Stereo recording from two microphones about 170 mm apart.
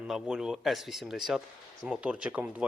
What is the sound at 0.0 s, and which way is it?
Speech, 5° right (ahead or behind).